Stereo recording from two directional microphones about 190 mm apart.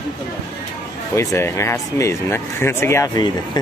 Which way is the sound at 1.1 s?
15° left (ahead or behind).